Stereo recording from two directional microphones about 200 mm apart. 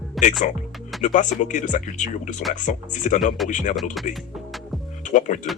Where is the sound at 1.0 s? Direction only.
40° left (ahead or behind).